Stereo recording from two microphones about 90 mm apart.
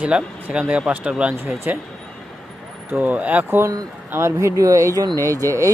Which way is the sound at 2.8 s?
20° right (ahead or behind).